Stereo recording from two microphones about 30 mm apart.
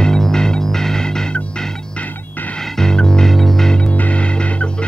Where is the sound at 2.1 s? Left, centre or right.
Left.